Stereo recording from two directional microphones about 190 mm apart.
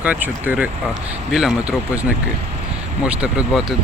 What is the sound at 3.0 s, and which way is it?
Speech, 5° right (ahead or behind).